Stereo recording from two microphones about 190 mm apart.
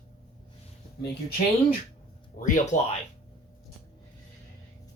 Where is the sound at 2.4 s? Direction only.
45° left (ahead or behind).